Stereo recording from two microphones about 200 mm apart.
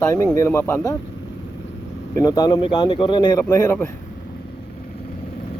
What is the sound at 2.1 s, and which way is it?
A man's voice, 20° left (ahead or behind).